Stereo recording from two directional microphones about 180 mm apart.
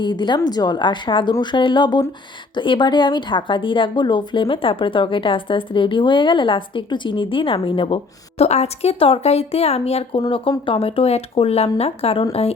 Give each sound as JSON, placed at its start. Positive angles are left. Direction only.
{"t": 0.0, "sound": "a woman's voice", "side_deg": 25}